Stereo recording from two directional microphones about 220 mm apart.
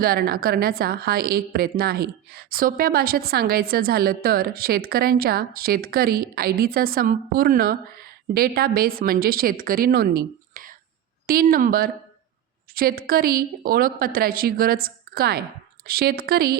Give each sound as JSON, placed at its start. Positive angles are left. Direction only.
{"t": 0.0, "sound": "a woman's voice", "side_deg": -45}